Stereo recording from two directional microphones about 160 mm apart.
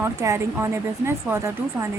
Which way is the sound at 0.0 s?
15° right (ahead or behind).